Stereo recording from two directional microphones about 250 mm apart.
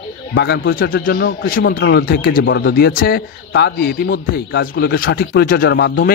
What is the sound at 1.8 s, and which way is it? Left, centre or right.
A man's voice, left.